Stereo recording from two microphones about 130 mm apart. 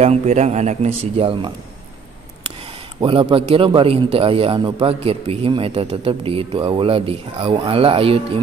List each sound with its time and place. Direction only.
0.0 s speech: 55° right (ahead or behind)
3.0 s a man's voice: 40° right (ahead or behind)